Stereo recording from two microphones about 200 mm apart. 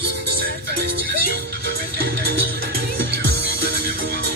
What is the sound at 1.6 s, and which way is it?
Music, 50° right (ahead or behind).